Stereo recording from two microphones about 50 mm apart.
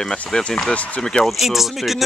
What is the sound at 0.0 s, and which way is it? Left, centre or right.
Speech, centre.